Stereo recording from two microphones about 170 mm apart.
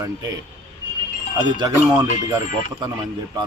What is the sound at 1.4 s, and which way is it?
Speech, 25° right (ahead or behind).